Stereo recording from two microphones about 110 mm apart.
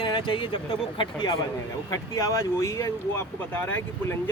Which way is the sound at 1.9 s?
30° left (ahead or behind).